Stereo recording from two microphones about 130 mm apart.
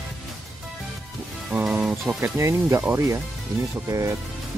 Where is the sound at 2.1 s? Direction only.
20° right (ahead or behind).